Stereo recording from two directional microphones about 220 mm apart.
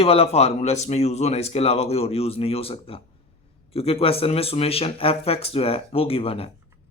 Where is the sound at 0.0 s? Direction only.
25° left (ahead or behind).